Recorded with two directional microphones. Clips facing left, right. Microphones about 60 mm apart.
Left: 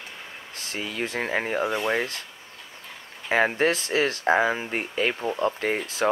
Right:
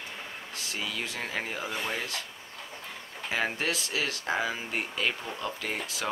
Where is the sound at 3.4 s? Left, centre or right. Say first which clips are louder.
Left 8 dB; left.